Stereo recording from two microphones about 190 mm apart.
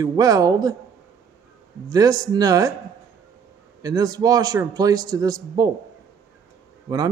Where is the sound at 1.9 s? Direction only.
20° right (ahead or behind).